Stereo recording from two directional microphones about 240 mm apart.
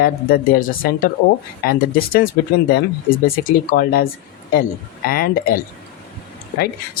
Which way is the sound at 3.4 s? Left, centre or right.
Left.